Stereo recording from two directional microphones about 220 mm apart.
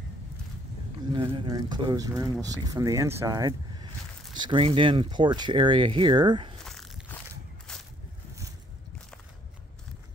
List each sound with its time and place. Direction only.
1.1 s speech: 20° right (ahead or behind)
6.6 s biting: centre (ahead or behind)
7.7 s a sound: 5° left (ahead or behind)